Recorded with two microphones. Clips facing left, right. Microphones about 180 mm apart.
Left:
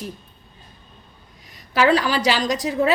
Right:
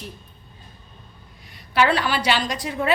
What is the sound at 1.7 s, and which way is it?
A woman's voice, 40° left (ahead or behind).